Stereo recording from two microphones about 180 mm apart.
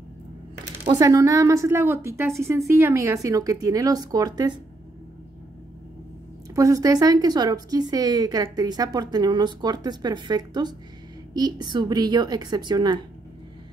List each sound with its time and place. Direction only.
0.8 s a woman's voice: 20° right (ahead or behind)
6.5 s speech: 20° right (ahead or behind)